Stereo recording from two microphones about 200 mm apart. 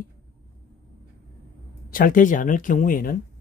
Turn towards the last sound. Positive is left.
turn(degrees=45)  # may be behind; listen again after turning